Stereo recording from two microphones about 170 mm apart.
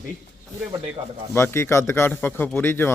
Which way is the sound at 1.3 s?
15° left (ahead or behind).